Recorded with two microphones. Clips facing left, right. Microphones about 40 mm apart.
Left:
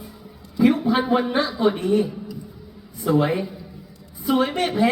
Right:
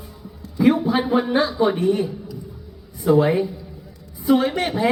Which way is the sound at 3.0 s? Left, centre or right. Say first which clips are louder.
Right 4 dB; centre.